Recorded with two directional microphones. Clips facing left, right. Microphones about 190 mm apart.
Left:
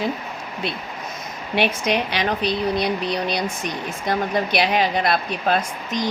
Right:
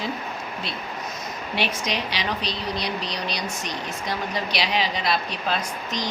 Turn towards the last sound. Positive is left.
turn(degrees=50)  # may be behind; listen again after turning